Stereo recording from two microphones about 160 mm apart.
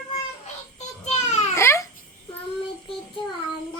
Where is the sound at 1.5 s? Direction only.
15° left (ahead or behind).